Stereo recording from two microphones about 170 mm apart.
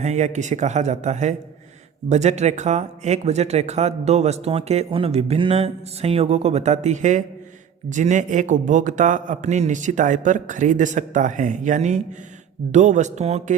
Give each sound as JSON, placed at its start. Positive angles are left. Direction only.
{"t": 0.0, "sound": "a man's voice", "side_deg": -40}